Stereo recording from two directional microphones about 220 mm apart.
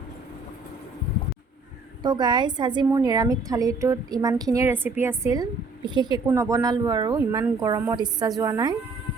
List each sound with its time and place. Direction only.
2.0 s a woman's voice: 20° right (ahead or behind)